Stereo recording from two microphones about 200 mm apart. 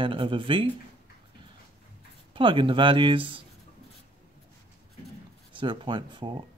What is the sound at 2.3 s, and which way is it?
Speech, 25° right (ahead or behind).